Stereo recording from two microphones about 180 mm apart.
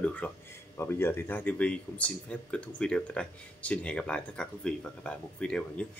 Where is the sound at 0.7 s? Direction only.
15° left (ahead or behind).